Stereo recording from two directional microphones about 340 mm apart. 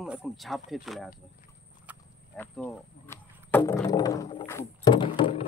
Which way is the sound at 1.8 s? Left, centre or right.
Centre.